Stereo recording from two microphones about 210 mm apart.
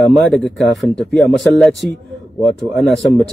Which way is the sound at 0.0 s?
Centre (ahead or behind).